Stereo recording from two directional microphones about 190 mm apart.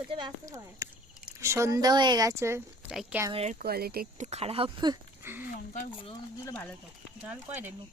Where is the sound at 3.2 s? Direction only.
30° right (ahead or behind).